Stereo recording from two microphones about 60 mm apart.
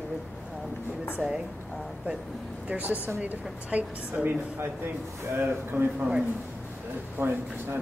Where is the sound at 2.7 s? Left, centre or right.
Right.